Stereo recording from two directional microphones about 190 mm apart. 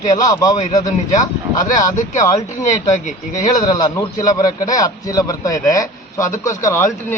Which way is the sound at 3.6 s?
20° left (ahead or behind).